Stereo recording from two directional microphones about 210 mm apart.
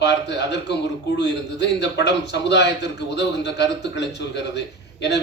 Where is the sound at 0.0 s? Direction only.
55° left (ahead or behind).